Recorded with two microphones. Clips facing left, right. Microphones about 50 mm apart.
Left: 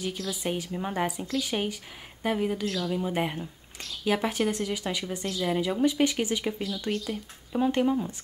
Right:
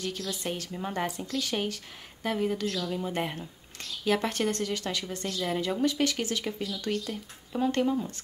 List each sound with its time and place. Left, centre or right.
0.0 s speech: centre
1.2 s speech: left